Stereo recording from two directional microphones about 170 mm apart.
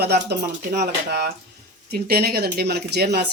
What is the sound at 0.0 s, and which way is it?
Speech, 75° right (ahead or behind).